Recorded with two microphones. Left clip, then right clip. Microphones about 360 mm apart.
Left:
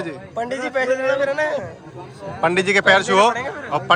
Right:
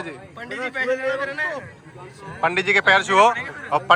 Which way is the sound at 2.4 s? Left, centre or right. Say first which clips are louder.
Left 2 dB; centre.